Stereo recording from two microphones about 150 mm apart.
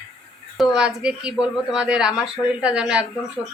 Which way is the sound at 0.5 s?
Centre (ahead or behind).